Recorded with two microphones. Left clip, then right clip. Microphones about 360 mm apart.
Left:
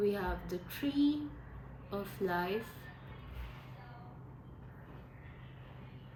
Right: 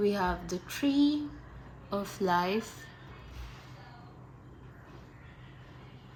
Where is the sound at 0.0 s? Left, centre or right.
Centre.